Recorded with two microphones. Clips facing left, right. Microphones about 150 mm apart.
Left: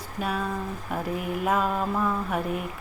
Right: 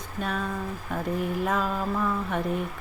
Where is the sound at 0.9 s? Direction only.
5° left (ahead or behind).